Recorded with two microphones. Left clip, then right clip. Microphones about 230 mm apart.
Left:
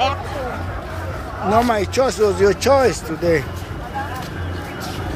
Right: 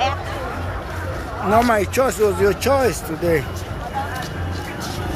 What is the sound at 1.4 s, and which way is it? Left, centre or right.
Speech, centre.